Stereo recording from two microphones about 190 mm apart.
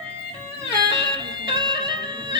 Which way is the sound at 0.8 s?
25° right (ahead or behind).